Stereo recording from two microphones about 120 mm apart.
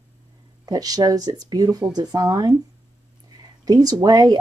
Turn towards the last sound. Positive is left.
turn(degrees=-30)  # may be behind; listen again after turning